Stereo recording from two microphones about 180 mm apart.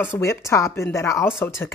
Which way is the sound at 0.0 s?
15° left (ahead or behind).